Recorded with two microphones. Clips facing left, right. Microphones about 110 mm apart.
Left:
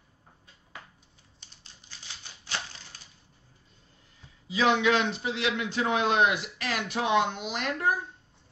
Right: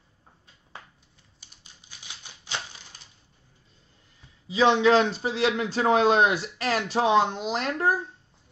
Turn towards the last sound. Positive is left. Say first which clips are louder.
# right 3 dB
turn(degrees=-35)  # may be behind; listen again after turning